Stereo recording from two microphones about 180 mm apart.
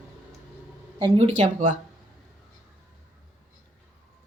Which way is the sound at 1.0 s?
35° right (ahead or behind).